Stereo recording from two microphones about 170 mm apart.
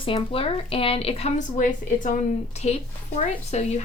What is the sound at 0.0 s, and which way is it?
Speech, 30° left (ahead or behind).